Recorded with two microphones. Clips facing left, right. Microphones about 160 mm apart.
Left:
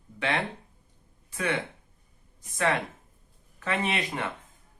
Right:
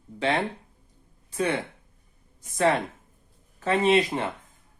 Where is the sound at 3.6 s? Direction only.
30° right (ahead or behind).